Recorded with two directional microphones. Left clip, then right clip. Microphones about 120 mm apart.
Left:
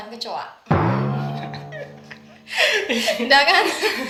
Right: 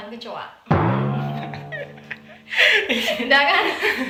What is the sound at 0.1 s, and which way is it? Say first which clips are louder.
Speech: left 6 dB; 35° left (ahead or behind).